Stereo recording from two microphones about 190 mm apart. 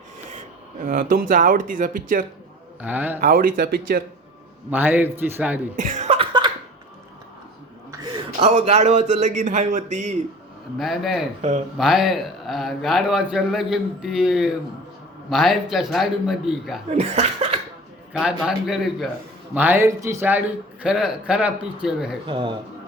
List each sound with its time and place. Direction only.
0.8 s speech: 45° right (ahead or behind)
2.8 s a man's voice: 10° right (ahead or behind)
3.2 s speech: 50° right (ahead or behind)
4.7 s a man's voice: 10° right (ahead or behind)
5.7 s cough: 40° right (ahead or behind); by 6.5 s 25° right (ahead or behind)
7.9 s a sound: 25° right (ahead or behind)
8.4 s speech: 35° right (ahead or behind)
10.8 s a man's voice: centre (ahead or behind)
16.9 s speech: 35° right (ahead or behind)
18.1 s a man's voice: 5° right (ahead or behind)
22.3 s speech: 25° right (ahead or behind)